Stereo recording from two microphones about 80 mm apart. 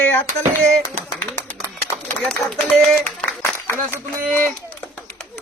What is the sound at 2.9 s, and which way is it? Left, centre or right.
Clapping, left.